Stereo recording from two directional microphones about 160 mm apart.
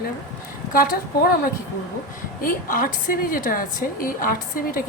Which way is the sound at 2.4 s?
60° left (ahead or behind).